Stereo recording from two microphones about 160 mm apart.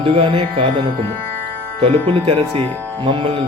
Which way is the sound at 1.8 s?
35° right (ahead or behind).